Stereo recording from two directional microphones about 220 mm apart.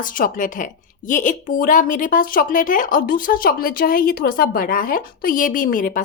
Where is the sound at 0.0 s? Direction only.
40° left (ahead or behind).